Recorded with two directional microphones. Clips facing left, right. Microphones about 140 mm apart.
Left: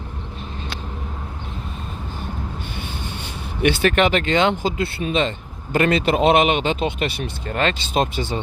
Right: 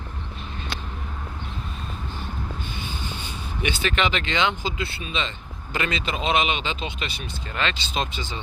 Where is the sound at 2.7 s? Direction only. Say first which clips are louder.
Left 2 dB; 60° left (ahead or behind).